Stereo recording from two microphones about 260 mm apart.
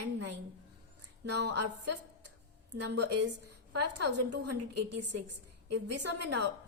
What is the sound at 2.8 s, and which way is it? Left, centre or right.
Speech, right.